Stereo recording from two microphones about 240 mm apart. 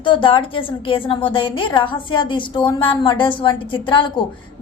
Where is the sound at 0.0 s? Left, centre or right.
Left.